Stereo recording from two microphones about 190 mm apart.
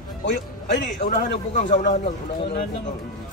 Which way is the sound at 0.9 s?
40° left (ahead or behind).